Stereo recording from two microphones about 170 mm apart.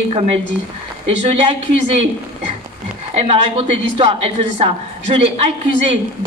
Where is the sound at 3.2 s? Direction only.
35° right (ahead or behind).